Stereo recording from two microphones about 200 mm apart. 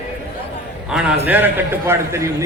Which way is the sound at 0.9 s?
5° right (ahead or behind).